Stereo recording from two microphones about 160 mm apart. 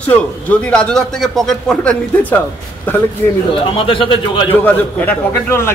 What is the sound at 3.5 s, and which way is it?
Speech, 30° left (ahead or behind).